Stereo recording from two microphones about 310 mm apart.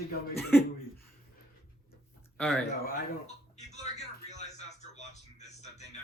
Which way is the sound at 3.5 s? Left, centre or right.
Left.